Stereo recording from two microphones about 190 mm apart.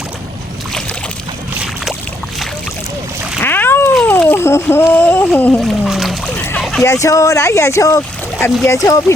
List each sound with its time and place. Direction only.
1.6 s boat: centre (ahead or behind)
3.4 s a sound: 10° left (ahead or behind)
5.8 s splash: centre (ahead or behind)
6.8 s speech: 15° left (ahead or behind)